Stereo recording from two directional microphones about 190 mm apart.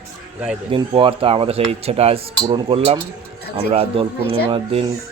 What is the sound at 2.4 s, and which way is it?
Cutlery, 25° right (ahead or behind).